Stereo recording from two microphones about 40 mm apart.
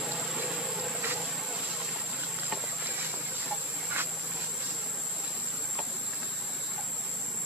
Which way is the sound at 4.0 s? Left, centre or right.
Right.